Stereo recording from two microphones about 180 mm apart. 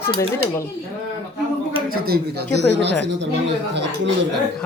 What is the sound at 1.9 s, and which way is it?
Speech, 60° right (ahead or behind).